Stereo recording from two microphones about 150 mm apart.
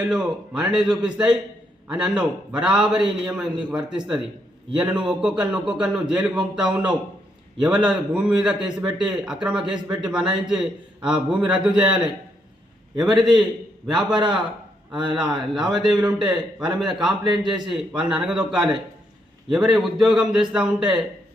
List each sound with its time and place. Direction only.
0.1 s a man's voice: 5° right (ahead or behind)
13.1 s a man's voice: 5° right (ahead or behind)
14.2 s a man's voice: 30° right (ahead or behind)
15.5 s a man's voice: 5° right (ahead or behind)